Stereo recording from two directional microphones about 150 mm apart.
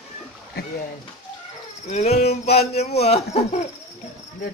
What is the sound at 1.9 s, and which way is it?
Speech, 45° left (ahead or behind).